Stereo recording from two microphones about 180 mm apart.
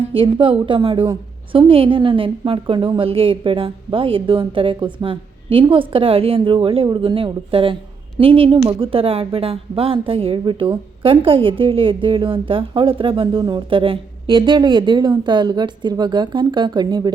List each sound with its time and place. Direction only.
0.0 s speech: 30° right (ahead or behind)